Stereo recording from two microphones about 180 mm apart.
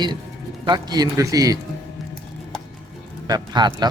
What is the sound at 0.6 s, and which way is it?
Speech, 25° right (ahead or behind).